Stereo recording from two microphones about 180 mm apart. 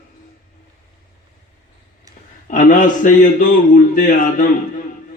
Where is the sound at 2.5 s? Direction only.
45° left (ahead or behind).